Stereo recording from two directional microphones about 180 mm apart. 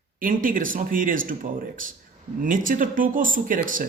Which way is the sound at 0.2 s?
50° right (ahead or behind).